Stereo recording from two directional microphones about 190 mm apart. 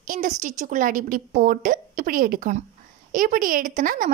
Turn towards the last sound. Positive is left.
turn(degrees=-45)  # may be behind; listen again after turning